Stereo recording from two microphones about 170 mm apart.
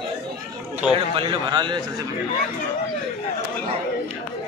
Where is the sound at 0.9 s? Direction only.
30° right (ahead or behind).